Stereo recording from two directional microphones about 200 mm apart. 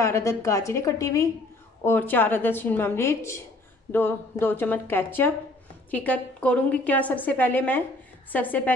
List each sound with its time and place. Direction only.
0.0 s a woman's voice: 15° left (ahead or behind)